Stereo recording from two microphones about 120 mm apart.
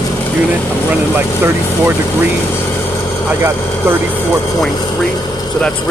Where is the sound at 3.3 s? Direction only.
15° right (ahead or behind).